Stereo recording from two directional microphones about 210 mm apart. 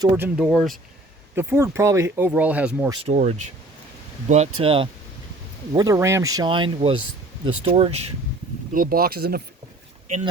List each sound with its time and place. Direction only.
0.0 s speech: 10° right (ahead or behind)
1.4 s speech: 10° right (ahead or behind)
2.9 s speech: 30° right (ahead or behind)
8.7 s speech: 45° right (ahead or behind)